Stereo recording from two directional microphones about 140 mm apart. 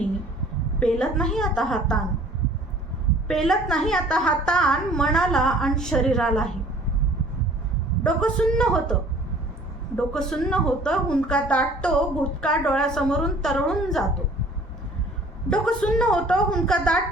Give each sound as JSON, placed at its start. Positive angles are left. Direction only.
{"t": 0.8, "sound": "a woman's voice", "side_deg": 5}
{"t": 3.2, "sound": "a woman's voice", "side_deg": 5}
{"t": 8.0, "sound": "a woman's voice", "side_deg": 5}
{"t": 15.4, "sound": "a woman's voice", "side_deg": 5}